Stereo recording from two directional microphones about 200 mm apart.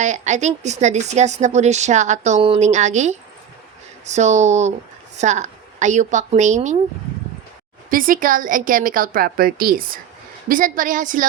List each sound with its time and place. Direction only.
0.0 s a woman's voice: 35° right (ahead or behind)
7.9 s speech: 45° right (ahead or behind)